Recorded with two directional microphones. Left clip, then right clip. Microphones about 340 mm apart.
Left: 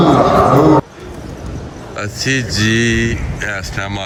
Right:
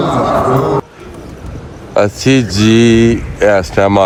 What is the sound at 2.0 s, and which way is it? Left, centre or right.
Speech, centre.